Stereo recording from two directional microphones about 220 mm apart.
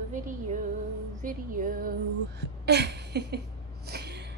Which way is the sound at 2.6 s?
50° right (ahead or behind).